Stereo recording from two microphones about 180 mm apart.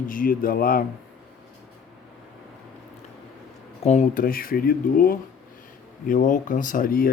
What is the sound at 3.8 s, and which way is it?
Speech, 40° left (ahead or behind).